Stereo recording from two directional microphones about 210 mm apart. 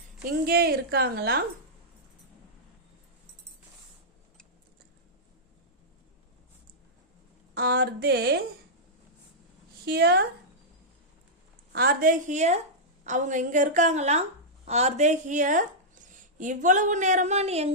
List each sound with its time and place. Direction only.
0.3 s a woman's voice: 45° right (ahead or behind)
7.5 s a woman's voice: 50° right (ahead or behind)
9.8 s a woman's voice: 50° right (ahead or behind)
11.7 s a woman's voice: 45° right (ahead or behind)